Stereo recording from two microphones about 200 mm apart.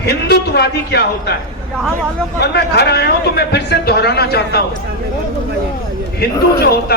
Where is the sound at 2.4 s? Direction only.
55° left (ahead or behind).